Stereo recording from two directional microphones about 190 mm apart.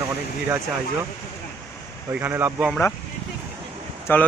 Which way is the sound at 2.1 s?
10° right (ahead or behind).